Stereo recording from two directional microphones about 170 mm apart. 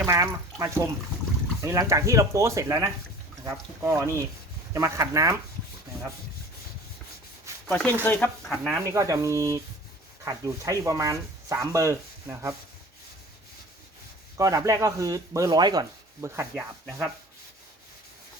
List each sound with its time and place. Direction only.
0.0 s speech: 15° right (ahead or behind)
4.7 s rub: 20° right (ahead or behind)
7.7 s speech: 10° left (ahead or behind)
8.4 s speech: 5° right (ahead or behind)
8.8 s speech: 20° right (ahead or behind)
14.3 s rub: 20° right (ahead or behind)